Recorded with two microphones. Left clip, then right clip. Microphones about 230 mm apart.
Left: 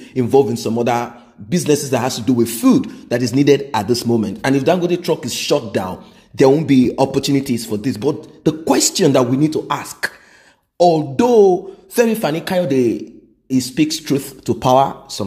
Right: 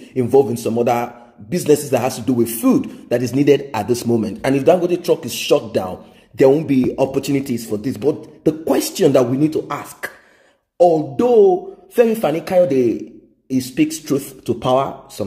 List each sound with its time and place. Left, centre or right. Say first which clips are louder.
0.1 s speech: even; left